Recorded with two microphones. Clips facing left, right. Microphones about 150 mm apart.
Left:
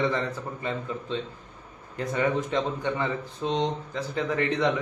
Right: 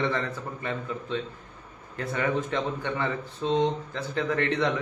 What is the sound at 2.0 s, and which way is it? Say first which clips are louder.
Speech: left 2 dB; 15° left (ahead or behind).